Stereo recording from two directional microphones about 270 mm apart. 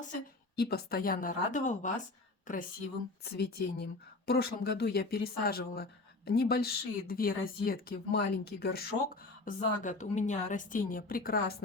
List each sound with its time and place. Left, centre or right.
0.5 s a woman's voice: left